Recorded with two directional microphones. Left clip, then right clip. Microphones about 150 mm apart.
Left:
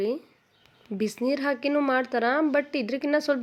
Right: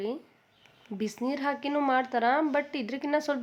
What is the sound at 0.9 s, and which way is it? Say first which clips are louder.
A woman's voice: left 5 dB; 25° left (ahead or behind).